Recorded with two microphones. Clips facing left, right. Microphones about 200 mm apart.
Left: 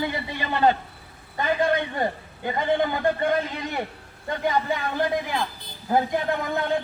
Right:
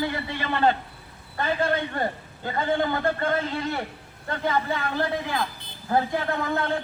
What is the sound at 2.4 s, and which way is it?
A man's voice, 15° left (ahead or behind).